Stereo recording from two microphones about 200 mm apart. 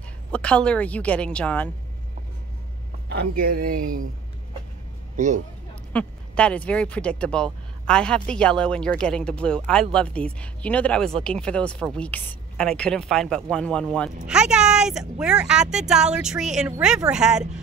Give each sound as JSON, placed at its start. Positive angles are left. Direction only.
{"t": 0.3, "sound": "speech", "side_deg": 5}
{"t": 3.1, "sound": "a man's voice", "side_deg": -50}
{"t": 5.1, "sound": "speech", "side_deg": -35}
{"t": 5.9, "sound": "speech", "side_deg": 5}